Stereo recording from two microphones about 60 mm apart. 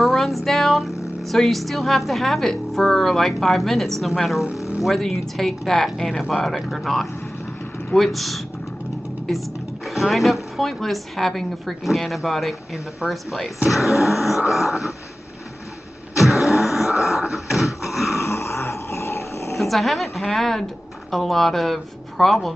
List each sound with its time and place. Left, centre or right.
0.0 s a sound: centre
1.3 s a woman's voice: centre
4.6 s a sound: left
4.8 s a woman's voice: centre
9.8 s a woman's voice: centre
16.2 s music: centre
16.8 s a sound: centre
17.2 s dog: centre
18.1 s dog: left
19.6 s a woman's voice: centre